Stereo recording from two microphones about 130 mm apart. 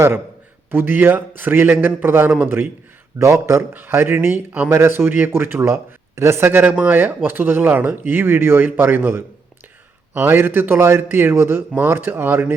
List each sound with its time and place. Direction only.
0.7 s speech: 15° right (ahead or behind)